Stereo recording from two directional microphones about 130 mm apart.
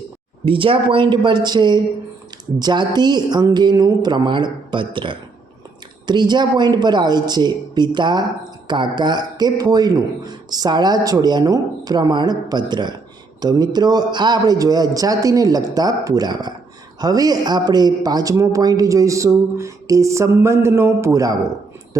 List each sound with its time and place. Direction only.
0.4 s a man's voice: 40° right (ahead or behind); by 21.3 s 25° right (ahead or behind)